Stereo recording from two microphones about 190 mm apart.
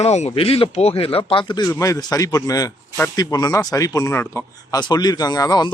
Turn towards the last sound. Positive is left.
turn(degrees=20)  # may be behind; listen again after turning